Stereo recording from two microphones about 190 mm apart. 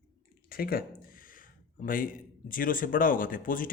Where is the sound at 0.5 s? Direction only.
50° left (ahead or behind).